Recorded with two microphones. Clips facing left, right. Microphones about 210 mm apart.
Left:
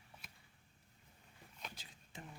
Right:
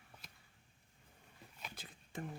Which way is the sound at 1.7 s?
55° right (ahead or behind).